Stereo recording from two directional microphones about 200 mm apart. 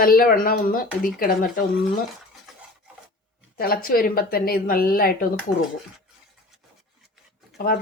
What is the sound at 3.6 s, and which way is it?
Speech, 45° left (ahead or behind).